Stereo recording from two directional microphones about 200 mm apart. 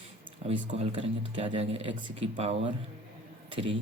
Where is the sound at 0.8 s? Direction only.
30° right (ahead or behind).